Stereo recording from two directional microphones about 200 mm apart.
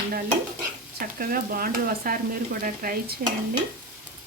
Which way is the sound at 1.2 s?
45° right (ahead or behind).